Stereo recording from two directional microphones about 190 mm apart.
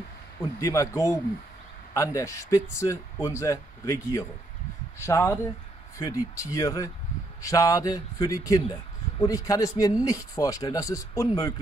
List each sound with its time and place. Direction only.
0.6 s speech: 15° left (ahead or behind)